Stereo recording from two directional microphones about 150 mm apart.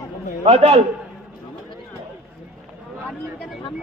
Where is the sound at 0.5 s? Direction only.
40° right (ahead or behind).